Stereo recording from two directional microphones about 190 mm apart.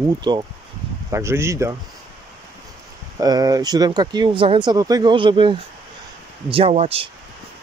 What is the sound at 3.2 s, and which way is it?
Speech, 20° right (ahead or behind).